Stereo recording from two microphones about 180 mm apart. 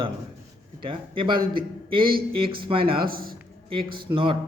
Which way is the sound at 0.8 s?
30° right (ahead or behind).